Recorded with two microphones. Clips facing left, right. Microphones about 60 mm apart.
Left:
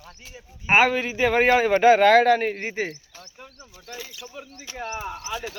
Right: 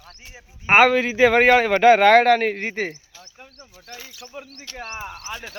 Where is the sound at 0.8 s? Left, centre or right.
Right.